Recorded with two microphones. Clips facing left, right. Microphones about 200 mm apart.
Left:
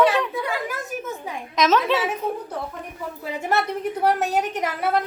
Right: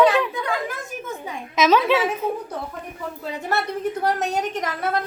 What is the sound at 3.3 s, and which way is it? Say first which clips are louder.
A woman's voice: left 2 dB; 15° left (ahead or behind).